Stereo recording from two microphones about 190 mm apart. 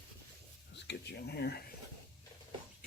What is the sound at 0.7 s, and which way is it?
Speech, 60° left (ahead or behind).